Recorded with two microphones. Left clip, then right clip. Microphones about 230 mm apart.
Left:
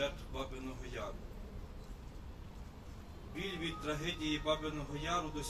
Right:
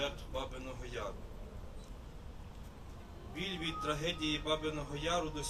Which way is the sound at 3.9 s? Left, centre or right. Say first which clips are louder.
Right 2 dB; right.